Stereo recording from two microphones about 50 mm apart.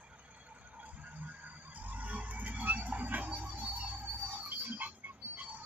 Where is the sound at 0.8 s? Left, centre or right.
Right.